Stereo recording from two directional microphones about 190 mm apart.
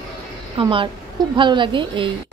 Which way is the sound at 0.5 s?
25° right (ahead or behind).